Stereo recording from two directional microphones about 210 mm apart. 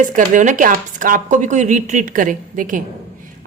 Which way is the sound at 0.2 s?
35° right (ahead or behind).